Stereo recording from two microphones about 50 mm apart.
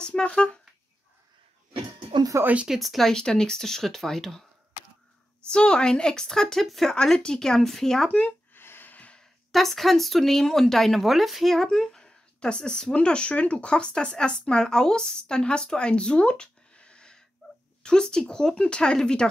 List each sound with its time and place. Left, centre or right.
0.0 s speech: centre
2.3 s speech: right
2.7 s speech: centre
3.1 s a woman's voice: centre
5.5 s a woman's voice: centre
6.9 s a woman's voice: centre
8.5 s a sound: left
9.5 s a woman's voice: centre